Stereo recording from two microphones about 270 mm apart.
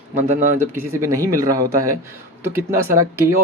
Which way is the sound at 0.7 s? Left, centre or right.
Centre.